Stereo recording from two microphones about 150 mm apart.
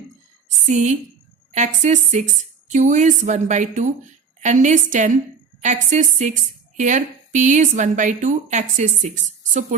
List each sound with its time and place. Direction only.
0.7 s a woman's voice: 50° right (ahead or behind)